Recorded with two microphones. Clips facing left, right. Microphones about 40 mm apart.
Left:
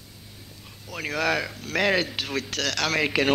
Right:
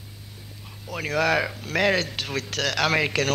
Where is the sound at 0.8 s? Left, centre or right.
Centre.